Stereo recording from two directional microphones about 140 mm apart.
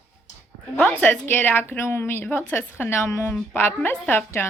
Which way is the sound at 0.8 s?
15° left (ahead or behind).